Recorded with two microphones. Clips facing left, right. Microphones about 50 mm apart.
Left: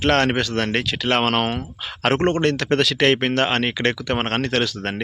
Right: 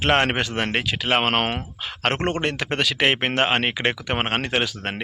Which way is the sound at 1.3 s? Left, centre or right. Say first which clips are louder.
Left 1 dB; right.